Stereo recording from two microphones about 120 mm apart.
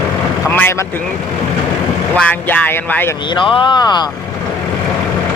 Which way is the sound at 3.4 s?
45° left (ahead or behind).